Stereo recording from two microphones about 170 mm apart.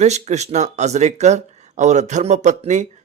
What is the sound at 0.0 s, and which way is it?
A man's voice, 40° right (ahead or behind).